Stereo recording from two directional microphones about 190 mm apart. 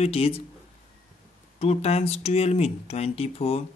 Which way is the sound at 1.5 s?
35° left (ahead or behind).